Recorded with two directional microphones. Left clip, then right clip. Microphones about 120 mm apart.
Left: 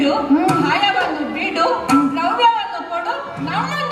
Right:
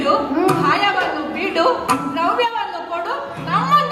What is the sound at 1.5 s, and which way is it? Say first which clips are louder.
Music: left 1 dB; 25° right (ahead or behind).